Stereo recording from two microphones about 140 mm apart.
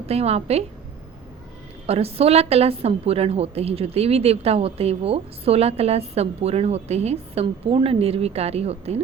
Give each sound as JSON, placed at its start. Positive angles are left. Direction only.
{"t": 0.0, "sound": "a woman's voice", "side_deg": -45}
{"t": 1.9, "sound": "a woman's voice", "side_deg": -45}
{"t": 7.4, "sound": "a woman's voice", "side_deg": -40}